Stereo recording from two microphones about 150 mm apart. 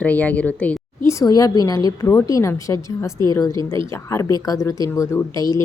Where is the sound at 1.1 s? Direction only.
25° left (ahead or behind).